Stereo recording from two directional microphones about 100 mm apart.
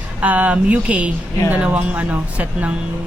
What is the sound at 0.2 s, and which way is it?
Speech, 15° right (ahead or behind).